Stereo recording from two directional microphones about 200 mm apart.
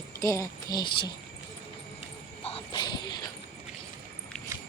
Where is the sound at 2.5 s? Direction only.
25° left (ahead or behind).